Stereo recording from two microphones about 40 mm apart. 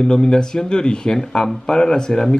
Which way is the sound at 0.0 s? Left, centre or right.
Centre.